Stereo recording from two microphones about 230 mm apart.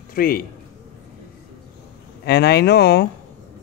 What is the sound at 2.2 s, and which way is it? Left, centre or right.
Speech, left.